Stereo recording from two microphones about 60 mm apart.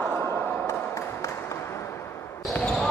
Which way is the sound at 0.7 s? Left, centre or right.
Left.